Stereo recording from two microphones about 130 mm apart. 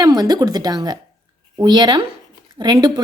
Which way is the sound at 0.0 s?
30° right (ahead or behind).